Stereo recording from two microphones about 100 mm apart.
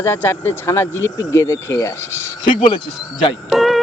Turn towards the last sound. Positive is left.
turn(degrees=0)  # may be behind; listen again after turning